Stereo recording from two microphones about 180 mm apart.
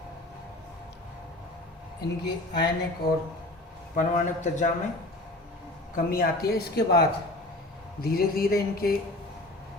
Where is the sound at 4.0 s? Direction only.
45° left (ahead or behind).